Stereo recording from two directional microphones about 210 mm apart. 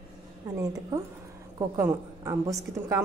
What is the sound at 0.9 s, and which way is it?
A woman's voice, 15° right (ahead or behind).